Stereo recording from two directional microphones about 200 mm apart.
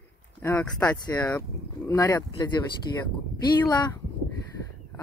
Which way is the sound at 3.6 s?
20° left (ahead or behind).